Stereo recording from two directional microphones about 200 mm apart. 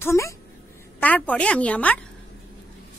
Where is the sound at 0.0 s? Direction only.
15° left (ahead or behind).